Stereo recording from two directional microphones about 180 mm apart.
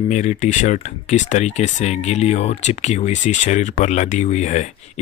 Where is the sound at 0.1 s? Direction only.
40° left (ahead or behind).